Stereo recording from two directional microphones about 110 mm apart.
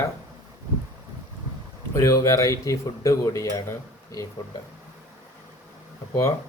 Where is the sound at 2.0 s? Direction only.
25° left (ahead or behind).